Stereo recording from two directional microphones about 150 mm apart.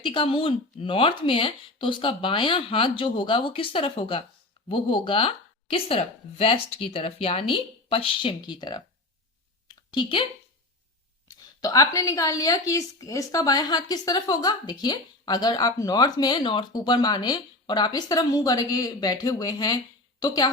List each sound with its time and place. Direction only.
0.0 s speech: 35° left (ahead or behind)
9.6 s a sound: 30° left (ahead or behind)
11.3 s a woman's voice: 25° left (ahead or behind)